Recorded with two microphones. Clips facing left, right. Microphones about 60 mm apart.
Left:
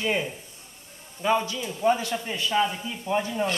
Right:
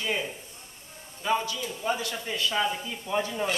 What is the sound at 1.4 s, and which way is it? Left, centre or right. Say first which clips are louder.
A man's voice: left 4 dB; left.